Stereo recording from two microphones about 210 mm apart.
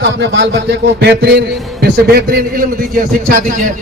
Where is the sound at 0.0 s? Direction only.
55° right (ahead or behind).